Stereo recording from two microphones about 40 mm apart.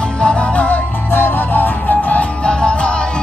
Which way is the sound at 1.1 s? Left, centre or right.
Left.